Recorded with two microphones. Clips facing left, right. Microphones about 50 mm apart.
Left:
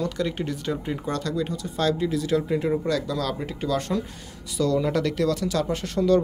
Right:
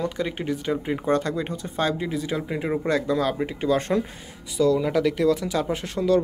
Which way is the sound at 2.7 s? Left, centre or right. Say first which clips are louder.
Right 2 dB; right.